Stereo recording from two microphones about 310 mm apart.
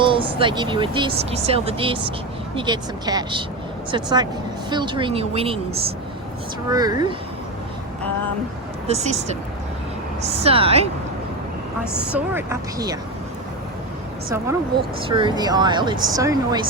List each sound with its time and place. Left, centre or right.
0.0 s speech: centre
6.7 s speech: centre
8.9 s a woman's voice: right
12.1 s speech: centre
15.0 s speech: centre